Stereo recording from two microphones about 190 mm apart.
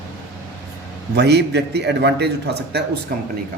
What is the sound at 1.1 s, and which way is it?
A man's voice, 60° right (ahead or behind).